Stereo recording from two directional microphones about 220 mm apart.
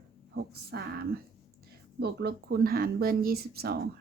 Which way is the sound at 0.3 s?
45° right (ahead or behind).